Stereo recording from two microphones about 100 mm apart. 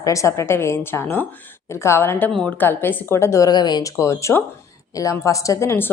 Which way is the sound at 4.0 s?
30° left (ahead or behind).